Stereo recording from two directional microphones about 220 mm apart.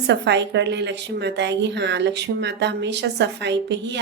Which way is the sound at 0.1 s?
55° right (ahead or behind).